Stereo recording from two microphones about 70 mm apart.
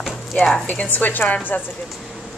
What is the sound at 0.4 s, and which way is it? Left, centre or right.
Speech, centre.